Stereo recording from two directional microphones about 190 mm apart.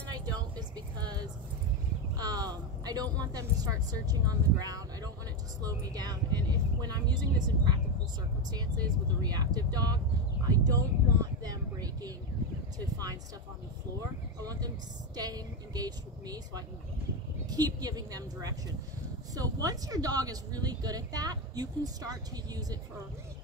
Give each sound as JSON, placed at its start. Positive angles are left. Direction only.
{"t": 0.1, "sound": "vehicle", "side_deg": -20}
{"t": 2.1, "sound": "speech", "side_deg": -20}
{"t": 14.4, "sound": "speech", "side_deg": -20}